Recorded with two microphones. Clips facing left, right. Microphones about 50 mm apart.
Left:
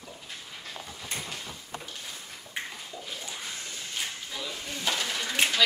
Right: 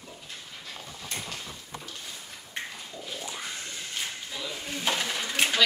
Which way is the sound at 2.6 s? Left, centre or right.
Centre.